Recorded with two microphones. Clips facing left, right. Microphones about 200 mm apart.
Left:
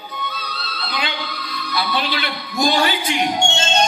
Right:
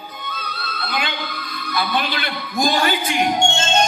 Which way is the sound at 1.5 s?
50° right (ahead or behind).